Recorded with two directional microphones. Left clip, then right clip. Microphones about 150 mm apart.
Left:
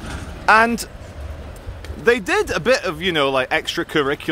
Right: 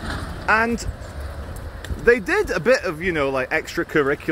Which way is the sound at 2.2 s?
10° left (ahead or behind).